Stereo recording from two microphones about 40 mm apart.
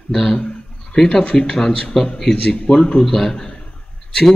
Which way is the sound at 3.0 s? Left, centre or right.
Centre.